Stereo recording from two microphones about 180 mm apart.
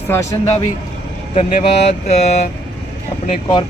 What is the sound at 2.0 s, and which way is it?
Speech, 40° left (ahead or behind).